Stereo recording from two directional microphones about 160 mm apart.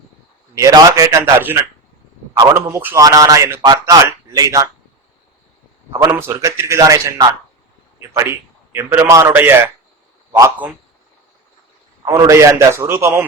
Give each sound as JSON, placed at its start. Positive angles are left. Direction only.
{"t": 0.5, "sound": "a man's voice", "side_deg": -20}
{"t": 6.1, "sound": "a man's voice", "side_deg": -15}
{"t": 12.0, "sound": "a man's voice", "side_deg": -20}